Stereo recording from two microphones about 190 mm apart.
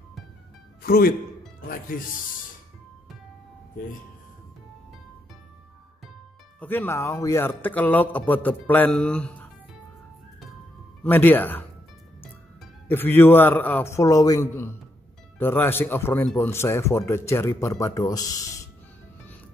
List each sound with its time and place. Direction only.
0.8 s speech: 50° left (ahead or behind)
6.6 s speech: 10° left (ahead or behind)
11.1 s speech: 10° left (ahead or behind)
12.8 s speech: 10° left (ahead or behind)